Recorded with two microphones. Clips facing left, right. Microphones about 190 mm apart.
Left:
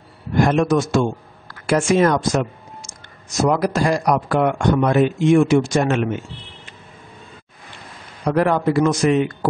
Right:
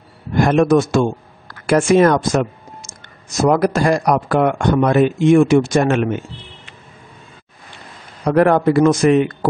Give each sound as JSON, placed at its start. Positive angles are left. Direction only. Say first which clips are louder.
{"t": 0.4, "sound": "speech", "louder": "right 3 dB", "side_deg": -55}
{"t": 8.3, "sound": "a man's voice", "louder": "right 4 dB", "side_deg": -55}